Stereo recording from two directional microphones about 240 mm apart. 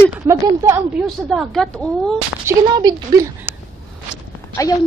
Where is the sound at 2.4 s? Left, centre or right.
Centre.